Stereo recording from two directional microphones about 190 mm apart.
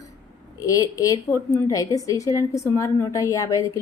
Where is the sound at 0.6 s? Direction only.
20° left (ahead or behind).